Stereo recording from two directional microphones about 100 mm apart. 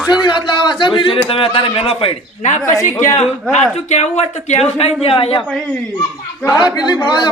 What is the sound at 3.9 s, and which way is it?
Speech, 90° left.